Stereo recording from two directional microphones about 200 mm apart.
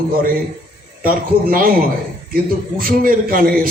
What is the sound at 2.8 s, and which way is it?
Speech, 45° right (ahead or behind).